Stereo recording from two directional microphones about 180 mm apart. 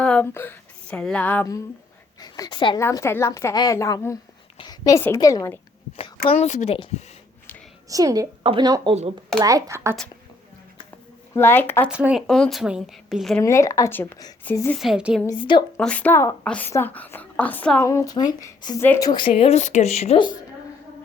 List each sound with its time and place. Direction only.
0.0 s a woman's voice: 5° left (ahead or behind); by 2.8 s 25° left (ahead or behind)
2.8 s a woman's voice: 15° left (ahead or behind)
6.2 s a woman's voice: 35° left (ahead or behind)
7.9 s speech: 20° right (ahead or behind)
11.3 s a woman's voice: 10° left (ahead or behind)
11.9 s a woman's voice: 5° right (ahead or behind)
13.4 s a woman's voice: 15° left (ahead or behind)
14.8 s a woman's voice: 5° right (ahead or behind)
15.4 s a woman's voice: 25° left (ahead or behind)
15.8 s a woman's voice: 5° left (ahead or behind); by 20.2 s 35° left (ahead or behind)